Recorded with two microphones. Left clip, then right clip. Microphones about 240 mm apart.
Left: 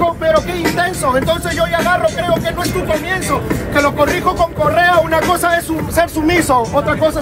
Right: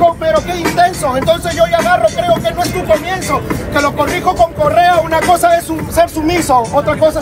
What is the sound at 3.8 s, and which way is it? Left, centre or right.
Speech, centre.